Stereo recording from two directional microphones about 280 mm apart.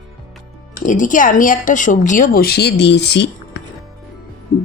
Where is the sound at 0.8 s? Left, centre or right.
Left.